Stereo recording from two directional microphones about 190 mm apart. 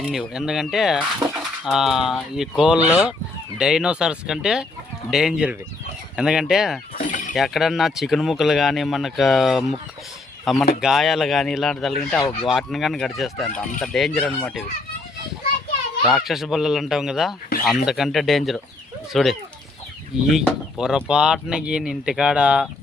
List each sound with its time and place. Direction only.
0.0 s speech: centre (ahead or behind)
7.1 s a sound: 40° left (ahead or behind)
7.3 s speech: centre (ahead or behind)
16.0 s speech: centre (ahead or behind)